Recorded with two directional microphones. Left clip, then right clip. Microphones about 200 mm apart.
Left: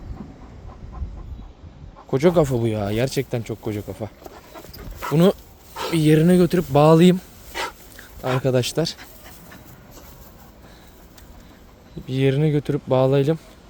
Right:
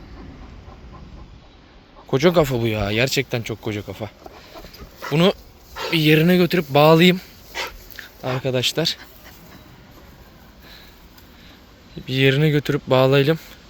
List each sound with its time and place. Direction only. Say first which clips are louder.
2.0 s speech: right 1 dB; 10° left (ahead or behind)
5.1 s speech: even; 25° left (ahead or behind)
12.0 s speech: right 3 dB; 10° left (ahead or behind)